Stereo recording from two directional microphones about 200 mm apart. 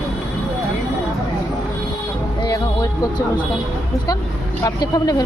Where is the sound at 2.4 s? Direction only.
20° left (ahead or behind).